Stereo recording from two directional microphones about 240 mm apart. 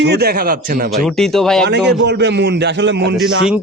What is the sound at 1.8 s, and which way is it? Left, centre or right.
A man's voice, right.